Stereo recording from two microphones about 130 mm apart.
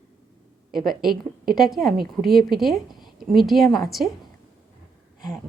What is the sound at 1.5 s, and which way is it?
A woman's voice, centre (ahead or behind).